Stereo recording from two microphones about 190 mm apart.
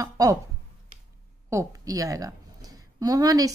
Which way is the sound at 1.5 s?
15° right (ahead or behind).